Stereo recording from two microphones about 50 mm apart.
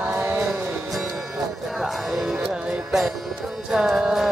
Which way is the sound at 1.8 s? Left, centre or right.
Centre.